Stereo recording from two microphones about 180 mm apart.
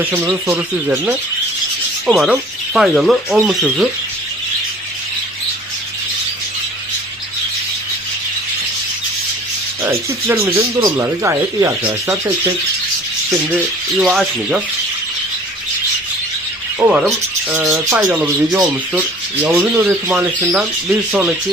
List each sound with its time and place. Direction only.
0.0 s speech: 10° right (ahead or behind)
9.8 s speech: 10° right (ahead or behind)
14.0 s speech: centre (ahead or behind)
16.8 s speech: centre (ahead or behind)